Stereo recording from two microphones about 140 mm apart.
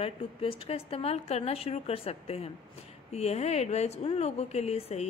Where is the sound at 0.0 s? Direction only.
40° left (ahead or behind).